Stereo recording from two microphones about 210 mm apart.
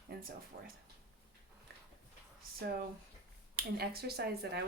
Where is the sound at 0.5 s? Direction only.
45° right (ahead or behind).